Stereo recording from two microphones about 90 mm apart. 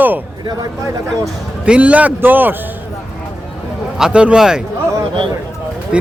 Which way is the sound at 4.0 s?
10° right (ahead or behind).